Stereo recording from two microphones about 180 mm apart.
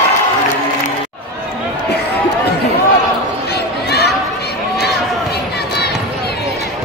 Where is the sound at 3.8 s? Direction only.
65° left (ahead or behind).